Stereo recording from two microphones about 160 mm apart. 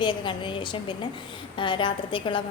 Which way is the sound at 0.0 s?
30° left (ahead or behind).